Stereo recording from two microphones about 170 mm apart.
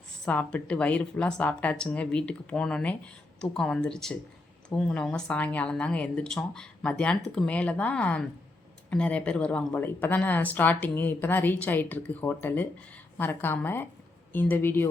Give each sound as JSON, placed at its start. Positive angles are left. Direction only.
{"t": 0.3, "sound": "a woman's voice", "side_deg": 10}